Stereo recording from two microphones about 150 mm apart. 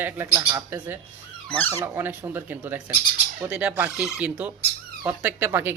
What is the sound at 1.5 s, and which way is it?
Speech, 10° left (ahead or behind).